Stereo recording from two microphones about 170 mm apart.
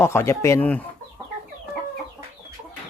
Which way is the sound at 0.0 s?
15° left (ahead or behind).